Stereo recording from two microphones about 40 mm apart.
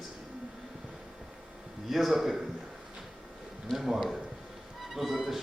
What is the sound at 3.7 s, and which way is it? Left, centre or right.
A man's voice, centre.